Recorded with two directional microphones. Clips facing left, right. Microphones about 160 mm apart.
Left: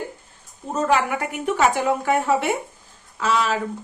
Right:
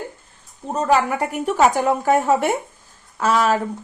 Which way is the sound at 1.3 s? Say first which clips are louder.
Right 3 dB; 40° right (ahead or behind).